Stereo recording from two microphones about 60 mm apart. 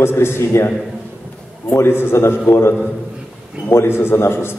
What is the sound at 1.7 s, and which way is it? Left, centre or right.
A man's voice, left.